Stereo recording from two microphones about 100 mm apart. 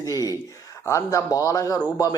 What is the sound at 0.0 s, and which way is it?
A man's voice, 35° left (ahead or behind).